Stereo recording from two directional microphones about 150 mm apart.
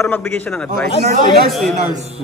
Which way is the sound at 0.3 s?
5° left (ahead or behind).